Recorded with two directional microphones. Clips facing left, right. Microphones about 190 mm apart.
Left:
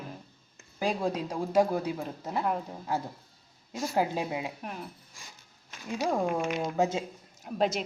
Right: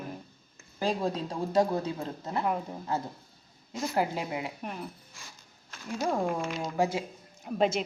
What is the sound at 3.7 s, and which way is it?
Speech, 15° left (ahead or behind).